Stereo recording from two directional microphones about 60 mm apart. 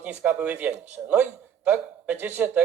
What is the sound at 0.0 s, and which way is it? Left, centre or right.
Speech, right.